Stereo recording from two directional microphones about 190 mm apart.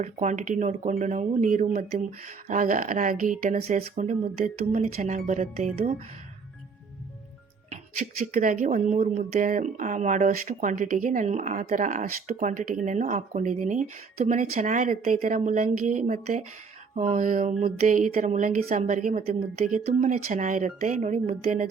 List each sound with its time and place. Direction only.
0.0 s speech: 40° right (ahead or behind)
8.3 s speech: 45° right (ahead or behind)